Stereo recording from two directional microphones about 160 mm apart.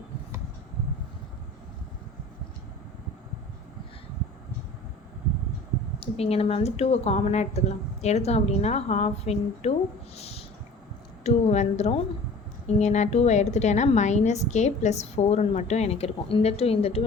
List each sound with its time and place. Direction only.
6.0 s a woman's voice: 40° left (ahead or behind)
10.2 s a sound: 40° left (ahead or behind)
11.2 s a woman's voice: 40° left (ahead or behind)